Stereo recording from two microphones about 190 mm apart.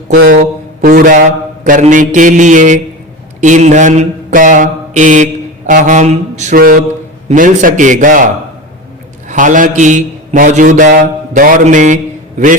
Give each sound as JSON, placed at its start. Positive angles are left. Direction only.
{"t": 0.3, "sound": "a man's voice", "side_deg": -50}
{"t": 3.4, "sound": "mantra", "side_deg": -40}
{"t": 7.3, "sound": "a man's voice", "side_deg": -45}
{"t": 9.3, "sound": "a man's voice", "side_deg": -40}